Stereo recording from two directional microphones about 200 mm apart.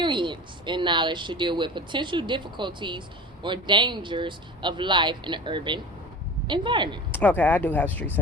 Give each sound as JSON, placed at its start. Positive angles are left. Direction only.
{"t": 0.0, "sound": "speech", "side_deg": -25}
{"t": 7.1, "sound": "speech", "side_deg": 10}